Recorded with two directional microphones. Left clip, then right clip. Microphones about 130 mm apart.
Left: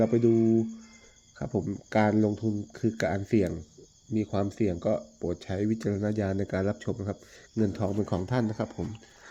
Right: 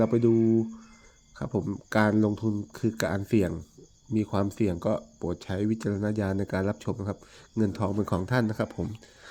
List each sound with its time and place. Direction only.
0.0 s speech: 25° right (ahead or behind)
1.4 s speech: 25° right (ahead or behind)
4.1 s speech: 40° right (ahead or behind); by 8.1 s 20° right (ahead or behind)
8.1 s speech: 30° right (ahead or behind)